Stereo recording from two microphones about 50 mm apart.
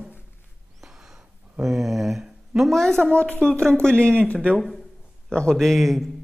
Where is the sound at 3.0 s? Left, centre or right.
Left.